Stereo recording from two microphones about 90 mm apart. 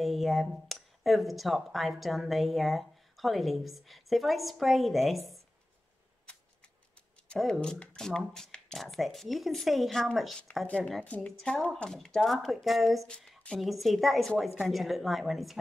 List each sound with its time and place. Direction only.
0.0 s speech: centre (ahead or behind)
7.3 s speech: centre (ahead or behind)